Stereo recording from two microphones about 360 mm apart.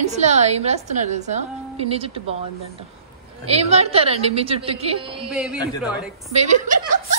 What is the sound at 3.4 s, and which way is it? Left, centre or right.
A woman's voice, centre.